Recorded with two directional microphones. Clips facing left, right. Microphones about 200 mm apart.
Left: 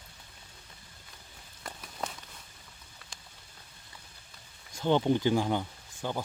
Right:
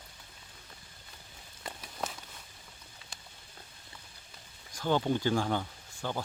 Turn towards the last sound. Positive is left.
turn(degrees=15)  # may be behind; listen again after turning